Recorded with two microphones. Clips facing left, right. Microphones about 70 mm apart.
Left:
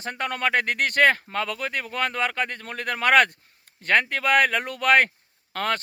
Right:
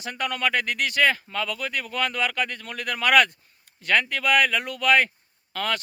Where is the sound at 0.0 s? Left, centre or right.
Left.